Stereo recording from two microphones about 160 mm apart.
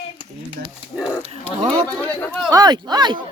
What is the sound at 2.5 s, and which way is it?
Speech, 25° right (ahead or behind).